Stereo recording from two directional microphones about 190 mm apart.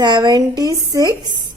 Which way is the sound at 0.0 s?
20° right (ahead or behind).